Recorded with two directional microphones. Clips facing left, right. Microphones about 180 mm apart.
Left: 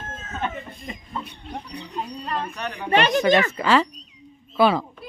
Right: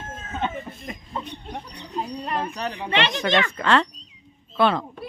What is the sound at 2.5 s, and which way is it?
Speech, 35° right (ahead or behind).